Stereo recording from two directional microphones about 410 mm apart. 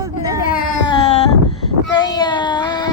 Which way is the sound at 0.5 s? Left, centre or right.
Centre.